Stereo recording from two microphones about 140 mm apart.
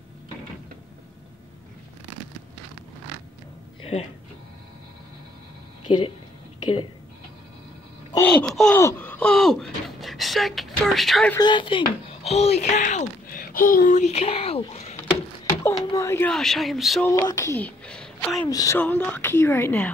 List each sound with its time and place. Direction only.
3.8 s speech: 45° left (ahead or behind)
5.9 s speech: 35° left (ahead or behind)
8.2 s speech: 10° left (ahead or behind)
8.7 s speech: 15° left (ahead or behind)
11.3 s speech: 35° left (ahead or behind)
12.1 s speech: 45° left (ahead or behind)
15.7 s speech: 25° left (ahead or behind)
16.3 s speech: 5° left (ahead or behind)
17.1 s speech: 25° left (ahead or behind); by 18.4 s centre (ahead or behind)
18.5 s speech: 25° left (ahead or behind)
18.8 s speech: 10° left (ahead or behind)